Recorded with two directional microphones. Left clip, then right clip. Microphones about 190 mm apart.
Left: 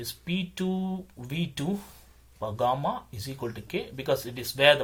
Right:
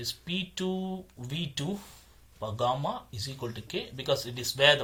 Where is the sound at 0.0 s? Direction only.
35° left (ahead or behind).